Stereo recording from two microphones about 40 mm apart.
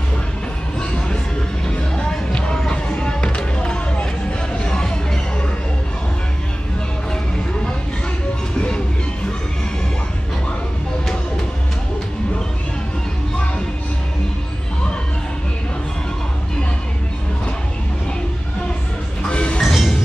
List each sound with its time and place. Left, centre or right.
0.7 s music: left
2.5 s a sound: centre
3.0 s music: left
8.5 s music: left
19.2 s music: left
19.6 s music: centre